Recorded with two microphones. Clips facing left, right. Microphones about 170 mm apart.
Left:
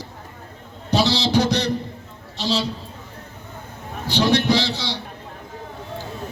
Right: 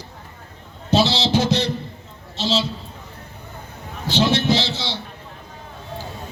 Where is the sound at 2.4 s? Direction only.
25° right (ahead or behind).